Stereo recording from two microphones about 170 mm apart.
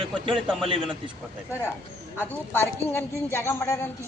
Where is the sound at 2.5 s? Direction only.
10° left (ahead or behind).